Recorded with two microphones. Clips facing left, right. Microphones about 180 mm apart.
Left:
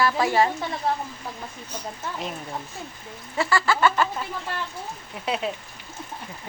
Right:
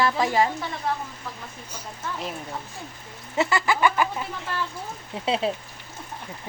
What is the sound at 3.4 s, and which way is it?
Bird, 20° right (ahead or behind).